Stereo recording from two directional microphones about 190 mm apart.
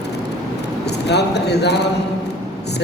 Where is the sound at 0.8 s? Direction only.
60° left (ahead or behind).